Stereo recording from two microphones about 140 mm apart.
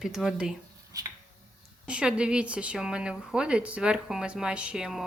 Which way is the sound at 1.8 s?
5° right (ahead or behind).